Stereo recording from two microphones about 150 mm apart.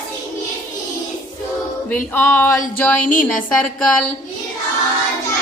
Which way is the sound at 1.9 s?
15° left (ahead or behind).